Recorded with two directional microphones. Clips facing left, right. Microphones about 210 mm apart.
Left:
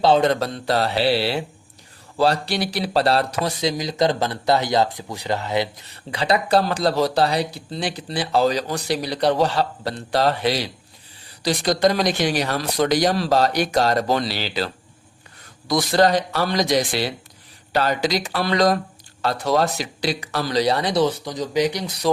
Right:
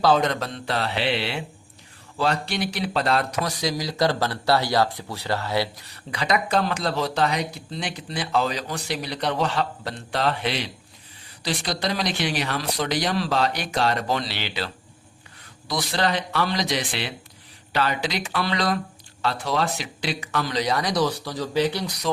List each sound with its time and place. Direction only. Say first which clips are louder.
0.0 s a man's voice: left 4 dB; 30° left (ahead or behind)
6.1 s speech: left 4 dB; 30° left (ahead or behind)